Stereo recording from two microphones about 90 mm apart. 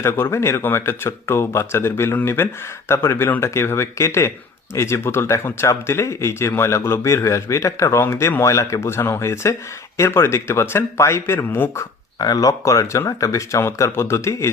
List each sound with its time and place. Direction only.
0.0 s speech: 25° left (ahead or behind)
12.2 s speech: 45° left (ahead or behind)